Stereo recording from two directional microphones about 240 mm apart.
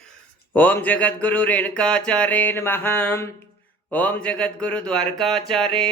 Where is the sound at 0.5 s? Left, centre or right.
Centre.